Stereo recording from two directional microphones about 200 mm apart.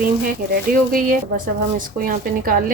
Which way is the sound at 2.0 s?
45° right (ahead or behind).